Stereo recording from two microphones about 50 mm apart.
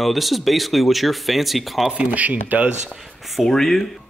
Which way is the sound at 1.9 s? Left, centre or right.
Right.